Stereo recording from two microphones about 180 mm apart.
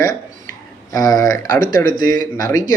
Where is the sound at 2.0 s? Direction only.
50° right (ahead or behind).